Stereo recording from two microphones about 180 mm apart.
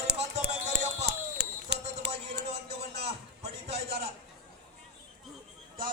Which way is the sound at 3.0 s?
35° right (ahead or behind).